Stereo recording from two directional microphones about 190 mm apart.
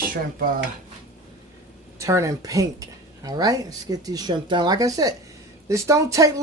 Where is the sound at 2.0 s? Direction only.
15° right (ahead or behind).